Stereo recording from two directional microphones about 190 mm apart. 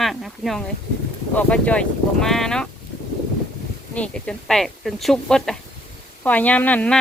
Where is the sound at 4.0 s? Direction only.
5° left (ahead or behind).